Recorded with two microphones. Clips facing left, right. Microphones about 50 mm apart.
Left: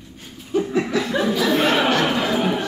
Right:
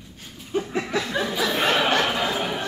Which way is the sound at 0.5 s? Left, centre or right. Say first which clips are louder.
Left 5 dB; right.